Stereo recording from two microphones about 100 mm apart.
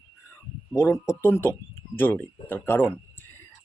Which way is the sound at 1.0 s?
25° left (ahead or behind).